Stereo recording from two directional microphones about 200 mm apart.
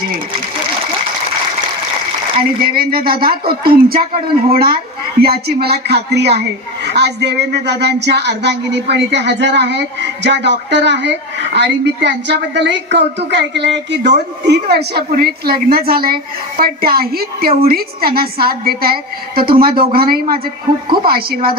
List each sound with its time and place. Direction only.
2.6 s a woman's voice: 50° right (ahead or behind)